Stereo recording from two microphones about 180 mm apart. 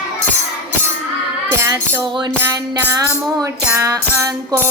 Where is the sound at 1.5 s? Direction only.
20° right (ahead or behind).